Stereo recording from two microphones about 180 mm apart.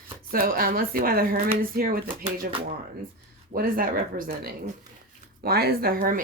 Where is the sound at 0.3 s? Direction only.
55° right (ahead or behind).